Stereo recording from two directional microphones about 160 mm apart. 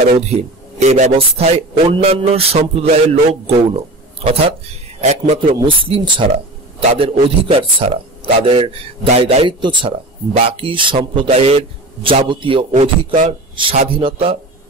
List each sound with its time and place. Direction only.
0.1 s a man's voice: 40° right (ahead or behind)
5.0 s a man's voice: 45° right (ahead or behind)